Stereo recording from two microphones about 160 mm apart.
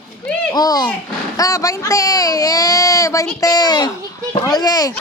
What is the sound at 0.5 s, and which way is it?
Speech, 25° left (ahead or behind).